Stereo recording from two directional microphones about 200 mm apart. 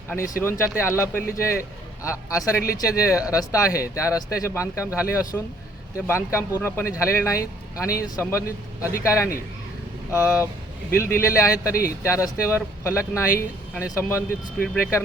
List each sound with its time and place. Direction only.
0.2 s a man's voice: 15° left (ahead or behind)